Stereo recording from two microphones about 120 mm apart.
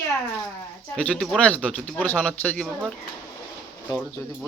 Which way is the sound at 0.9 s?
10° left (ahead or behind).